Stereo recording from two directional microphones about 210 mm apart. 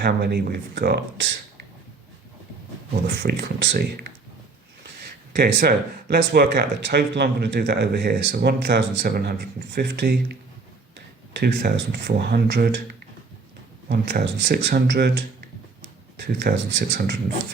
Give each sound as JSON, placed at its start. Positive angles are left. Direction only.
{"t": 0.0, "sound": "speech", "side_deg": -50}
{"t": 3.1, "sound": "speech", "side_deg": -50}
{"t": 5.3, "sound": "speech", "side_deg": -50}
{"t": 11.3, "sound": "speech", "side_deg": -50}
{"t": 13.8, "sound": "speech", "side_deg": -45}
{"t": 16.2, "sound": "speech", "side_deg": -50}